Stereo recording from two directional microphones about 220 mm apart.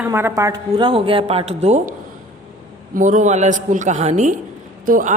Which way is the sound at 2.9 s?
35° right (ahead or behind).